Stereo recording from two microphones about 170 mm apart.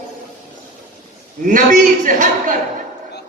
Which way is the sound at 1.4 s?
50° right (ahead or behind).